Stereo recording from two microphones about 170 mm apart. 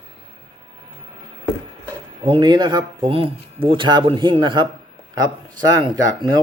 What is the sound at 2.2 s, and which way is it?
A man's voice, 30° right (ahead or behind).